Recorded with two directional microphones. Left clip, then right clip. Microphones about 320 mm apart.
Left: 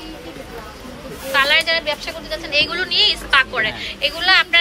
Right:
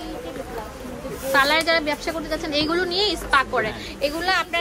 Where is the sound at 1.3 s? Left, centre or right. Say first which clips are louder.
Left 3 dB; centre.